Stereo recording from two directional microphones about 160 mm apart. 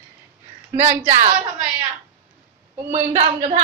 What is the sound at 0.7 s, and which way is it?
Speech, 40° right (ahead or behind).